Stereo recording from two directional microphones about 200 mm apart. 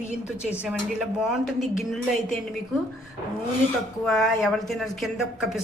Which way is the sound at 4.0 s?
Centre (ahead or behind).